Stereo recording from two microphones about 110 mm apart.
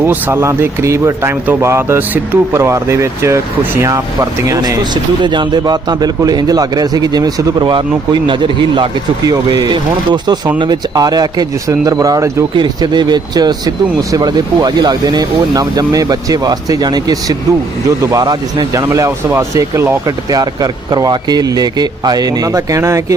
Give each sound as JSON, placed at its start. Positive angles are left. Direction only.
{"t": 0.0, "sound": "speech", "side_deg": -20}
{"t": 12.5, "sound": "speech", "side_deg": -40}
{"t": 20.1, "sound": "speech", "side_deg": -35}